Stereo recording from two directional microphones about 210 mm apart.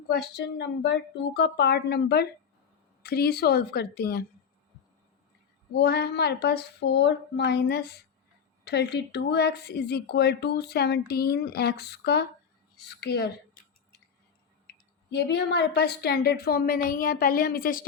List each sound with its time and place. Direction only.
0.1 s speech: 50° left (ahead or behind)
5.7 s a woman's voice: 50° left (ahead or behind)
14.7 s speech: 50° left (ahead or behind)